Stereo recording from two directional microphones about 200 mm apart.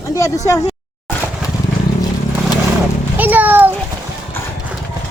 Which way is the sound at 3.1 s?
10° right (ahead or behind).